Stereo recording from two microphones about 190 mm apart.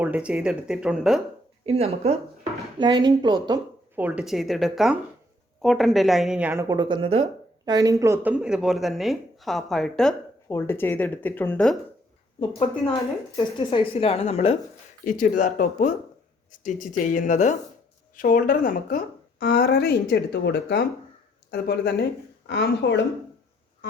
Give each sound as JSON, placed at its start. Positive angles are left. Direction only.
{"t": 0.0, "sound": "speech", "side_deg": -5}
{"t": 1.6, "sound": "speech", "side_deg": -35}
{"t": 2.4, "sound": "speech", "side_deg": -25}
{"t": 3.9, "sound": "speech", "side_deg": -10}
{"t": 6.9, "sound": "speech", "side_deg": -30}
{"t": 12.4, "sound": "a woman's voice", "side_deg": 30}
{"t": 15.0, "sound": "speech", "side_deg": 45}
{"t": 23.8, "sound": "music", "side_deg": 65}